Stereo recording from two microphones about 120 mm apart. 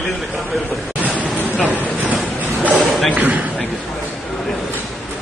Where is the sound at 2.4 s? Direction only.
15° right (ahead or behind).